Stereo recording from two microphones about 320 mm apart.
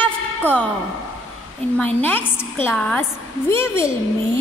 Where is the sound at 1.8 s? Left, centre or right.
Centre.